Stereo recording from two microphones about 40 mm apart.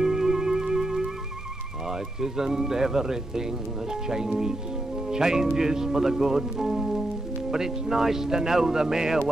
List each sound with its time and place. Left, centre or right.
0.0 s theremin: centre
1.9 s speech: centre